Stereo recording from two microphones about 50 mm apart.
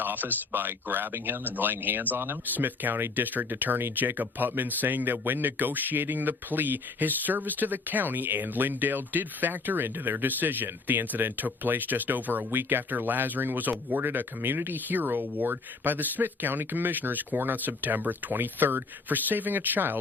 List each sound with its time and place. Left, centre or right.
0.0 s speech: right